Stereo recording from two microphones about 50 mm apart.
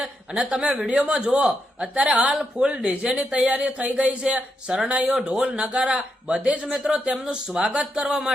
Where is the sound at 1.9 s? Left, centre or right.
Right.